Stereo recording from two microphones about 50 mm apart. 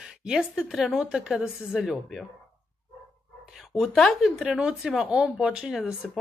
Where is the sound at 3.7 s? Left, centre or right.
Centre.